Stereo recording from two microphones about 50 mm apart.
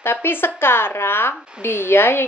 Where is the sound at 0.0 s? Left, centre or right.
Left.